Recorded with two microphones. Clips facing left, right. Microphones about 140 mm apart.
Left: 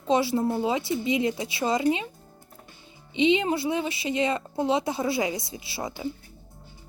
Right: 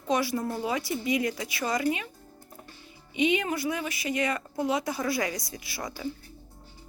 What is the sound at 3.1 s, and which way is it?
A woman's voice, 25° left (ahead or behind).